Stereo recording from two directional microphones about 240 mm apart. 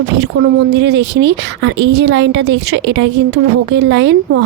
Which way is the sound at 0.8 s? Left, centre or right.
Right.